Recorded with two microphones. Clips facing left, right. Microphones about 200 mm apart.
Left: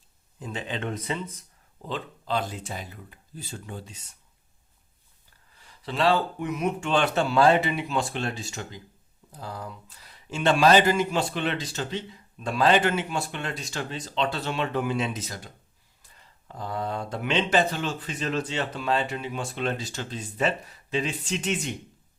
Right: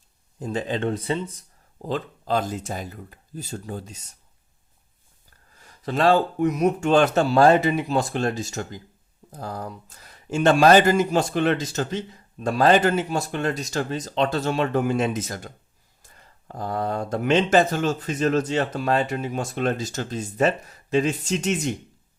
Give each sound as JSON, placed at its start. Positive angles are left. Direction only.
{"t": 0.3, "sound": "speech", "side_deg": -40}
{"t": 5.5, "sound": "speech", "side_deg": -45}